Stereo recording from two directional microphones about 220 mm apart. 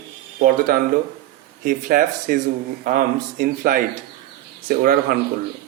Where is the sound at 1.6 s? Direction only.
40° right (ahead or behind).